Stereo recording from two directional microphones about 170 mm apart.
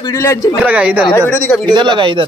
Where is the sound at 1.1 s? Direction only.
10° left (ahead or behind).